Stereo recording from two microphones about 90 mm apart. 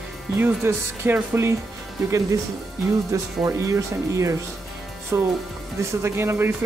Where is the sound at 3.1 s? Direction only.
35° right (ahead or behind).